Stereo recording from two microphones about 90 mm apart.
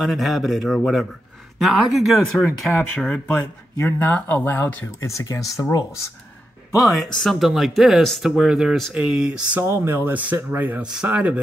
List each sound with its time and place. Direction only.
0.0 s speech: centre (ahead or behind)
3.7 s speech: 30° left (ahead or behind)
5.1 s speech: 35° left (ahead or behind)
6.8 s speech: centre (ahead or behind)
9.6 s speech: 30° right (ahead or behind)